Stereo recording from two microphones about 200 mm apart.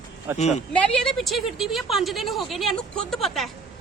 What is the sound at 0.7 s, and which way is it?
A woman's voice, 5° left (ahead or behind).